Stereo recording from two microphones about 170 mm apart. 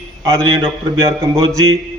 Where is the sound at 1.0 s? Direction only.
15° right (ahead or behind).